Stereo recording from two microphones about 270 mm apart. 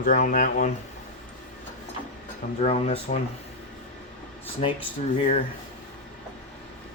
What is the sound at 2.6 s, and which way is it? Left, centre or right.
Speech, left.